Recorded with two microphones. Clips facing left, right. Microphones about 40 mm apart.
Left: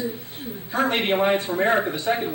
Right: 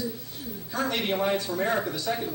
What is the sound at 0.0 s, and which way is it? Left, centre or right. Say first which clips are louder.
A man's voice: left 4 dB; left.